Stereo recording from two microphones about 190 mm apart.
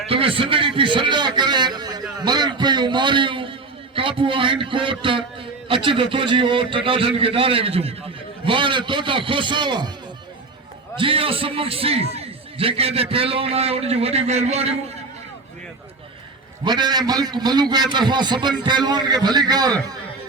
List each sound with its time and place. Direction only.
0.1 s a sound: 30° right (ahead or behind)
3.9 s a man's voice: 25° right (ahead or behind)
10.9 s a man's voice: 30° right (ahead or behind)
16.6 s a man's voice: 25° right (ahead or behind)